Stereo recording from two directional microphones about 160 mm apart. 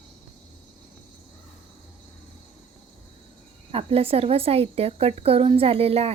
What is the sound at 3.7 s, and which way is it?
A woman's voice, 35° right (ahead or behind).